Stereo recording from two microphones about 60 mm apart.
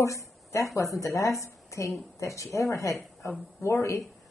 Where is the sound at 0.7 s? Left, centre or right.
Left.